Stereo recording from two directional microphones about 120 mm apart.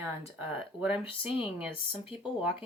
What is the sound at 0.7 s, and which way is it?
Speech, 10° right (ahead or behind).